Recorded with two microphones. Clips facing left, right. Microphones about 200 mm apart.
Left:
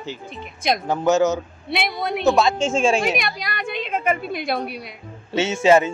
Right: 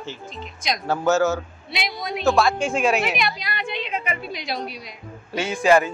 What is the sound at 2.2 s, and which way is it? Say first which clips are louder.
Speech: left 1 dB; 20° left (ahead or behind).